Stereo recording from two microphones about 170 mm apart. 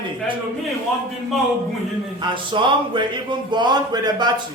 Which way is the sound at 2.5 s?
30° right (ahead or behind).